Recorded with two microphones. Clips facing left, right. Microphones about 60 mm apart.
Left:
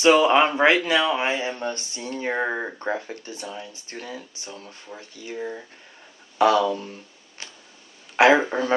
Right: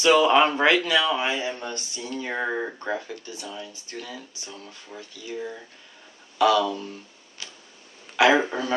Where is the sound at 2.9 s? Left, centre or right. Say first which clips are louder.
Left 2 dB; left.